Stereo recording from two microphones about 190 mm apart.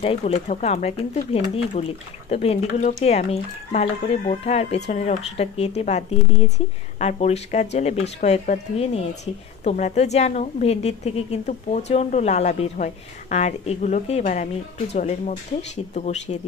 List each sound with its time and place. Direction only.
0.0 s speech: 35° left (ahead or behind)